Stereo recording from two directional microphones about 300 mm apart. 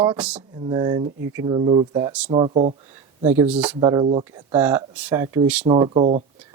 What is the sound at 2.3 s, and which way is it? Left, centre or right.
Speech, centre.